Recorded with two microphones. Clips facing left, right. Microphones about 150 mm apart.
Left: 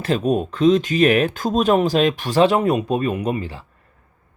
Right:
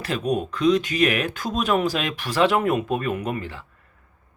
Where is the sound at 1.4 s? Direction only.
45° left (ahead or behind).